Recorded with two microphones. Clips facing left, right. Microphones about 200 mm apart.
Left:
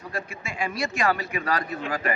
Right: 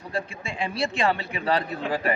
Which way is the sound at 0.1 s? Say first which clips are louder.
Right 4 dB; 30° right (ahead or behind).